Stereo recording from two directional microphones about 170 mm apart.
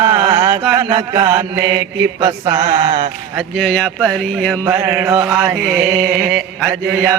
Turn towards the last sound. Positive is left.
turn(degrees=-15)  # may be behind; listen again after turning